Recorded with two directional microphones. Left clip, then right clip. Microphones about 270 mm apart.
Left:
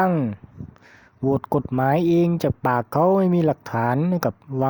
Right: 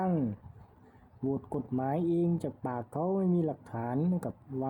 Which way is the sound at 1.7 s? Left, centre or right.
Left.